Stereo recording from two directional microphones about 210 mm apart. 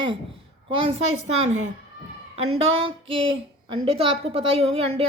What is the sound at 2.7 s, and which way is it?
A woman's voice, 25° right (ahead or behind).